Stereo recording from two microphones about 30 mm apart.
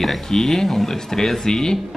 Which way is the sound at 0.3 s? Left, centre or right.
Centre.